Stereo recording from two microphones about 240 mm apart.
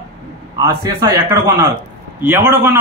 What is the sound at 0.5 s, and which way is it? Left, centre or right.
A man's voice, centre.